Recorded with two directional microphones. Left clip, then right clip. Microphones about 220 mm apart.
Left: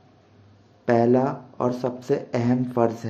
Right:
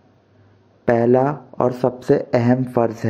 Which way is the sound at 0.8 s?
30° right (ahead or behind).